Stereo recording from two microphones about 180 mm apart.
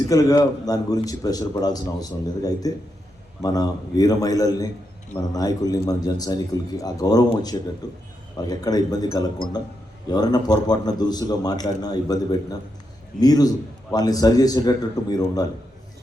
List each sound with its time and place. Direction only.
0.1 s a man's voice: 20° left (ahead or behind)